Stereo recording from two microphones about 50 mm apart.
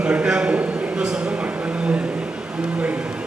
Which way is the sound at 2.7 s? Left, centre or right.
Right.